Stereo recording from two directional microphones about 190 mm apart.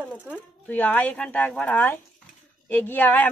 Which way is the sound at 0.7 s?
10° left (ahead or behind).